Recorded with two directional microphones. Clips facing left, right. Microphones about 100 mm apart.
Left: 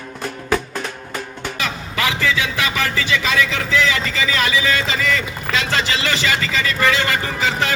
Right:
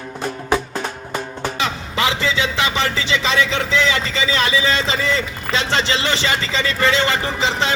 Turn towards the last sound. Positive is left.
turn(degrees=-25)  # may be behind; listen again after turning